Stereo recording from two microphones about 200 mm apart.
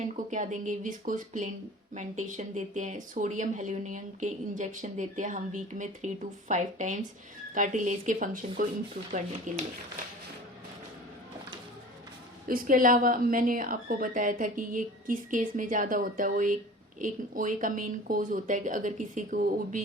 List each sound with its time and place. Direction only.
0.0 s speech: 35° right (ahead or behind)
12.5 s a woman's voice: 45° right (ahead or behind)